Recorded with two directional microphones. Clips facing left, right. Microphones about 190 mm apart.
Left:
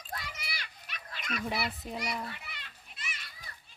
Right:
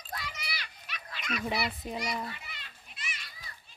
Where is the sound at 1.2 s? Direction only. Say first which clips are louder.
Right 2 dB; 50° left (ahead or behind).